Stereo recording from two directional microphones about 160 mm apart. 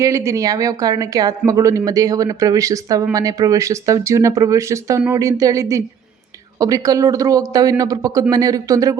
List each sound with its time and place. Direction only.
0.0 s speech: 20° right (ahead or behind)